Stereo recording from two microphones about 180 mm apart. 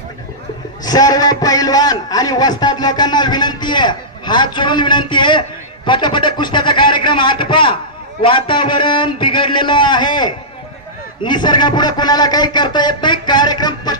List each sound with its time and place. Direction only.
0.8 s a man's voice: 20° left (ahead or behind)